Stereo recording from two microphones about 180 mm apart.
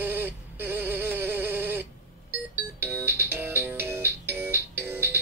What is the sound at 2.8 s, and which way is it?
Music, 10° right (ahead or behind).